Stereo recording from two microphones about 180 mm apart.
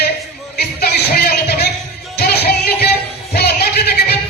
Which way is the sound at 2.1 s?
60° left (ahead or behind).